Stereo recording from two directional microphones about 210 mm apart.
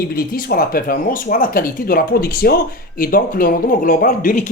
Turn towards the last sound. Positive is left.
turn(degrees=40)  # may be behind; listen again after turning